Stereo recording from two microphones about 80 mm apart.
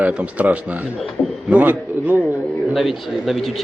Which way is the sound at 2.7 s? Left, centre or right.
Centre.